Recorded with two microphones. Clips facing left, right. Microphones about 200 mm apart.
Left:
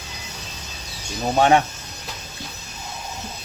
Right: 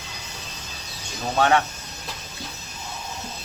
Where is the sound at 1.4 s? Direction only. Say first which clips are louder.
Left 3 dB; 15° left (ahead or behind).